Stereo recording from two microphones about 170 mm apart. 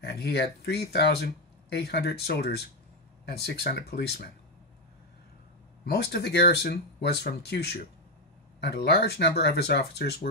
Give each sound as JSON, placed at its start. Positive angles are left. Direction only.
{"t": 0.0, "sound": "speech", "side_deg": 75}
{"t": 5.9, "sound": "speech", "side_deg": 75}